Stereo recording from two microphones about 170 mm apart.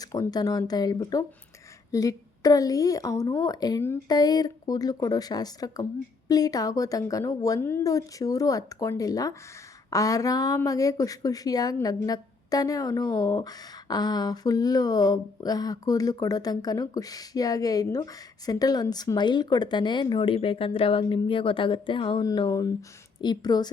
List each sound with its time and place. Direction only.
0.0 s speech: 20° left (ahead or behind)